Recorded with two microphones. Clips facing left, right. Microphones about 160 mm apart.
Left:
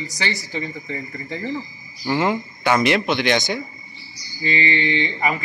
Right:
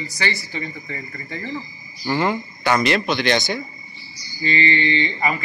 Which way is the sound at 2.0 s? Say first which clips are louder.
Left 1 dB; 10° left (ahead or behind).